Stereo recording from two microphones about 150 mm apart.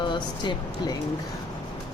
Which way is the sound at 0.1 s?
30° left (ahead or behind).